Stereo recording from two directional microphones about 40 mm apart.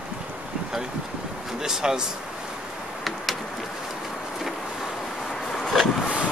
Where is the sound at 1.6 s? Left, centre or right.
Centre.